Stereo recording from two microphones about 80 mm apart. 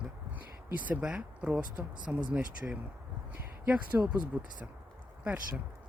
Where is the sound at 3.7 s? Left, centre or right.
Centre.